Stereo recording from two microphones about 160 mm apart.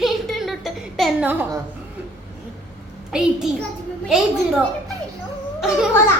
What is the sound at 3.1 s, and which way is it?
Speech, 5° right (ahead or behind).